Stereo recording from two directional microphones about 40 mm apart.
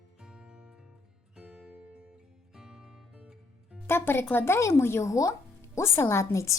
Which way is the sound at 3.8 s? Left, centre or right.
Left.